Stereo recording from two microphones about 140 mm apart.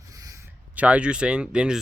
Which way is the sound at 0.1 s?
25° right (ahead or behind).